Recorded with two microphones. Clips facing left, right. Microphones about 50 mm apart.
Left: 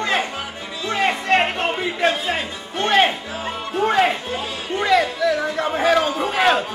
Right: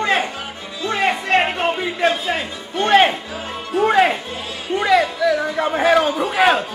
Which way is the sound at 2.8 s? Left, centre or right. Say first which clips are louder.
Right 3 dB; centre.